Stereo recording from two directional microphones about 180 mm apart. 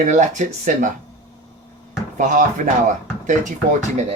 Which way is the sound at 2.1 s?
45° right (ahead or behind).